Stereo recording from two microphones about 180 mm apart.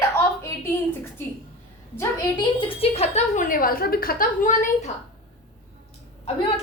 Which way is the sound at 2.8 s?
35° left (ahead or behind).